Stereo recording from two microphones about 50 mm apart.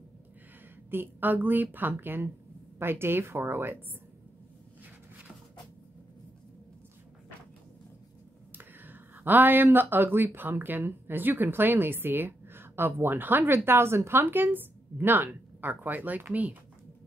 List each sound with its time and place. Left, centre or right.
0.8 s a woman's voice: right
8.5 s speech: right
13.7 s a woman's voice: right